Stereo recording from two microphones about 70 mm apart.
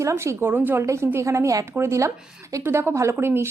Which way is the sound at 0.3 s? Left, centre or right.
Right.